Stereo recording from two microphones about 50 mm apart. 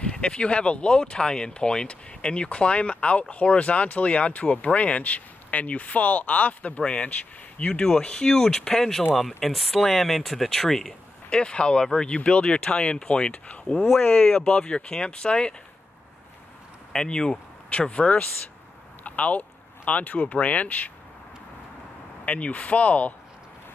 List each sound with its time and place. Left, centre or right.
0.1 s speech: left
9.4 s speech: centre
11.2 s speech: left
12.2 s speech: left
16.9 s speech: centre; by 20.9 s left
22.2 s speech: left